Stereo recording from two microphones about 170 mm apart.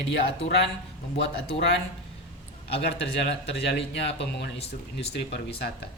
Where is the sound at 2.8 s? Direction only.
80° left.